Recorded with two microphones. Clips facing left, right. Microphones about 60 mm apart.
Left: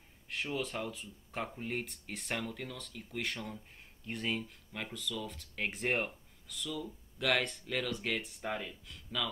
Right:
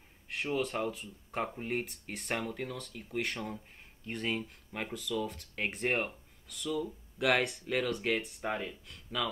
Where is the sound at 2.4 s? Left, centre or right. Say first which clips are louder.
Right 4 dB; centre.